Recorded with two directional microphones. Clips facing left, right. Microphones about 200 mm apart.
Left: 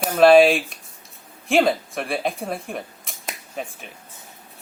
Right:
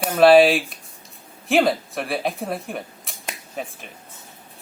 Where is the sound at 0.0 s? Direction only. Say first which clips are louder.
Even; centre (ahead or behind).